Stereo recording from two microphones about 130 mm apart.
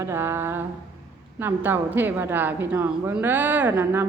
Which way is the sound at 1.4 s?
15° right (ahead or behind).